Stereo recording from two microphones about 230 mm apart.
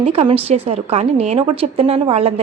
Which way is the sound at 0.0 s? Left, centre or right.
Right.